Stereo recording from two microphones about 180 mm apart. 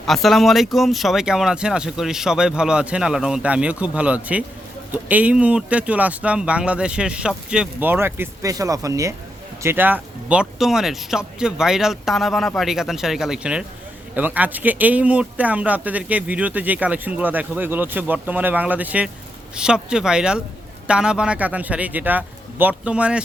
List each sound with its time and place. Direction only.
0.0 s speech: centre (ahead or behind)